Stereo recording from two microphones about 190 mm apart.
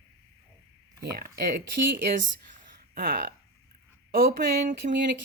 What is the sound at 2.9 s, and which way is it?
Speech, 50° right (ahead or behind).